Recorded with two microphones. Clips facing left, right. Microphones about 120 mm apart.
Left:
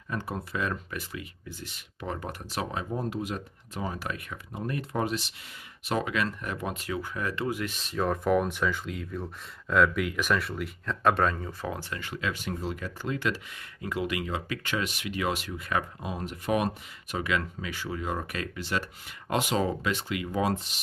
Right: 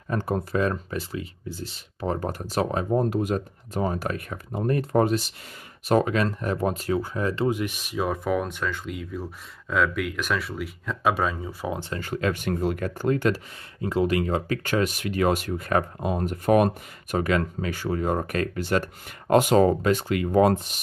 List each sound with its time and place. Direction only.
0.1 s speech: 45° right (ahead or behind); by 11.5 s 5° right (ahead or behind)
11.6 s speech: 20° right (ahead or behind)
11.9 s speech: 45° right (ahead or behind)
13.7 s speech: 30° right (ahead or behind); by 20.8 s 50° right (ahead or behind)